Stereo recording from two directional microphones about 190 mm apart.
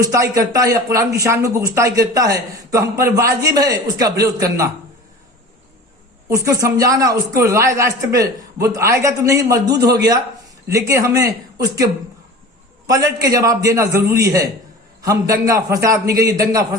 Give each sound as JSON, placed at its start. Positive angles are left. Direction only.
{"t": 0.0, "sound": "speech", "side_deg": -15}
{"t": 6.2, "sound": "speech", "side_deg": -15}
{"t": 12.9, "sound": "speech", "side_deg": -20}